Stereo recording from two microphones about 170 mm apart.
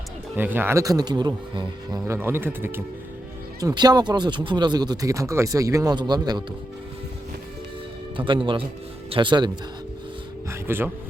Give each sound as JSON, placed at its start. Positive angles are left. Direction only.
{"t": 0.3, "sound": "speech", "side_deg": -10}
{"t": 8.1, "sound": "speech", "side_deg": -30}
{"t": 10.5, "sound": "a sound", "side_deg": -15}